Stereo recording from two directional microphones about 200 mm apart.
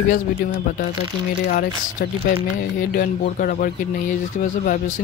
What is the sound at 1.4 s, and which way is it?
Speech, 45° left (ahead or behind).